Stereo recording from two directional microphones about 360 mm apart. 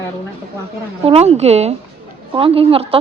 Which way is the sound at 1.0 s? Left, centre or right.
Centre.